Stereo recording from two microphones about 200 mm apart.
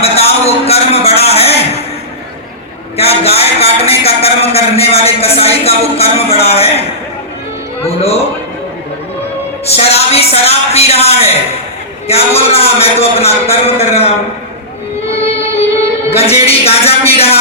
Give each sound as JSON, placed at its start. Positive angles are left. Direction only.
{"t": 0.0, "sound": "a man's voice", "side_deg": 30}
{"t": 3.0, "sound": "a man's voice", "side_deg": 30}
{"t": 9.6, "sound": "a man's voice", "side_deg": 30}
{"t": 16.0, "sound": "a man's voice", "side_deg": 30}